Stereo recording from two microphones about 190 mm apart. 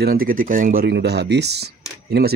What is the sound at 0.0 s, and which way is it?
Speech, 50° right (ahead or behind).